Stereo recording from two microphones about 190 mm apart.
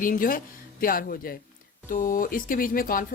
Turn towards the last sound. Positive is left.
turn(degrees=45)  # may be behind; listen again after turning